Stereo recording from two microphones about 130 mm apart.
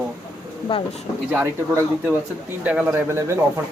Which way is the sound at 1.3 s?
20° right (ahead or behind).